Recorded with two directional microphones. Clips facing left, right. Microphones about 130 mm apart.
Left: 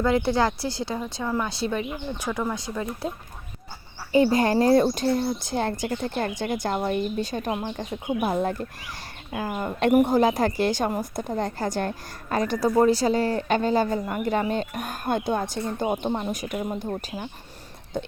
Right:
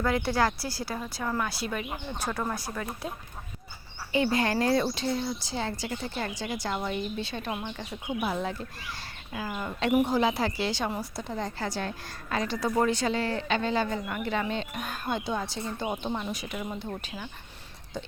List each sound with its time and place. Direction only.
0.0 s speech: 25° left (ahead or behind)
2.1 s speech: 15° left (ahead or behind)
4.1 s a woman's voice: 40° left (ahead or behind)